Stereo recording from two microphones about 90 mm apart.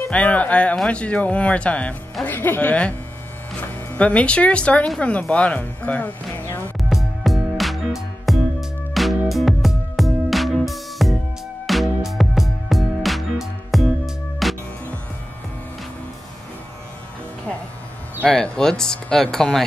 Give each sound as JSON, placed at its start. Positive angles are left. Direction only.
{"t": 0.1, "sound": "speech", "side_deg": 15}
{"t": 3.9, "sound": "speech", "side_deg": 15}
{"t": 6.8, "sound": "music", "side_deg": 0}
{"t": 18.2, "sound": "speech", "side_deg": 10}